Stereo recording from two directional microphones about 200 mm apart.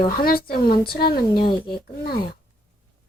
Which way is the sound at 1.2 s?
25° left (ahead or behind).